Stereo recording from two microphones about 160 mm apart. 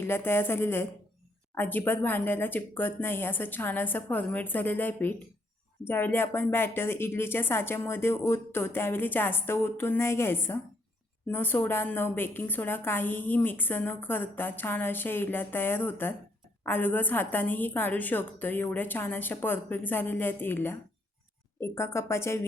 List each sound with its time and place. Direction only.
0.0 s a woman's voice: 15° left (ahead or behind)